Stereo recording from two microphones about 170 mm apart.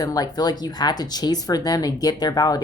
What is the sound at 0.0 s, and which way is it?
Speech, 20° left (ahead or behind).